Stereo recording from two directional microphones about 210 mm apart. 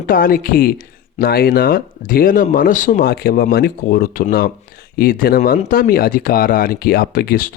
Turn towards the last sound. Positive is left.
turn(degrees=45)  # may be behind; listen again after turning